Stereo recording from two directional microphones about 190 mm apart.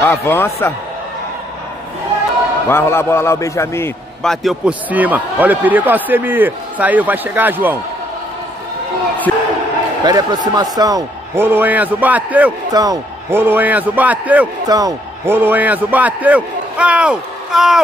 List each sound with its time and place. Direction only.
0.0 s a man's voice: 10° left (ahead or behind)
2.7 s a man's voice: 15° left (ahead or behind)
4.2 s speech: centre (ahead or behind)
9.3 s speech: 10° left (ahead or behind)
10.0 s a man's voice: 20° right (ahead or behind)
12.7 s speech: 20° right (ahead or behind)
14.7 s speech: 20° right (ahead or behind); by 17.8 s centre (ahead or behind)